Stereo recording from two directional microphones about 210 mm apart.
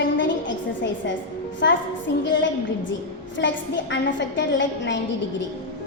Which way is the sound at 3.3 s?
60° left (ahead or behind).